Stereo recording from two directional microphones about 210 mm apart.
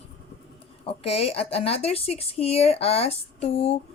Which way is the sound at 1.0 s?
30° left (ahead or behind).